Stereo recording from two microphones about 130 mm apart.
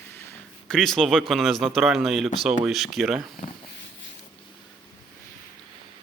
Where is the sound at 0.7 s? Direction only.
5° left (ahead or behind).